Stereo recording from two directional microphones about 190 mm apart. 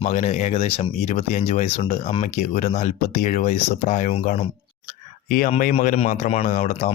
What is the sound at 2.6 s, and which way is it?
Speech, 35° left (ahead or behind).